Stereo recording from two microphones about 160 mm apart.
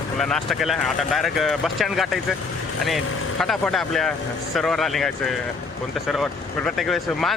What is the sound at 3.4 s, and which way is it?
Speech, centre (ahead or behind).